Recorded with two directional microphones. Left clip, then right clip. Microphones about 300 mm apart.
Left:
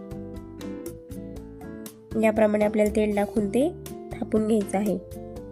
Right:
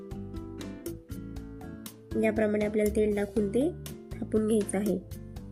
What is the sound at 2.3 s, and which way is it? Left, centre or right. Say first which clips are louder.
A woman's voice: left 7 dB; left.